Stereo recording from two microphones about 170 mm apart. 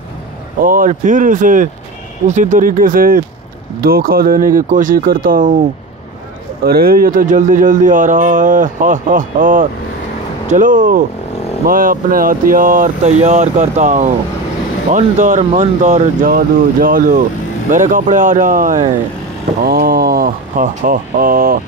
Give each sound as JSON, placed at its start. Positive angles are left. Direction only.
{"t": 0.7, "sound": "a man's voice", "side_deg": -50}
{"t": 6.6, "sound": "a man's voice", "side_deg": -60}